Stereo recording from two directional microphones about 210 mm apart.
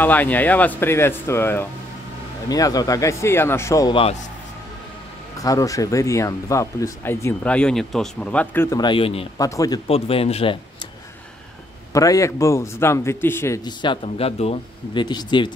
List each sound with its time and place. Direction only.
0.0 s speech: 10° left (ahead or behind); by 4.2 s 25° left (ahead or behind)
5.4 s speech: 15° left (ahead or behind)
9.4 s speech: 15° left (ahead or behind)
9.8 s speech: 25° left (ahead or behind)
11.9 s speech: 15° left (ahead or behind)